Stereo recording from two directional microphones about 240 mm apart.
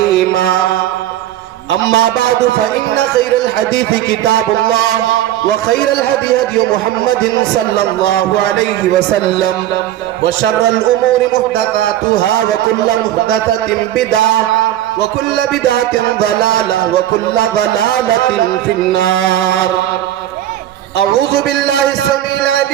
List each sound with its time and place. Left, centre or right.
1.7 s a man's voice: right
10.4 s a man's voice: right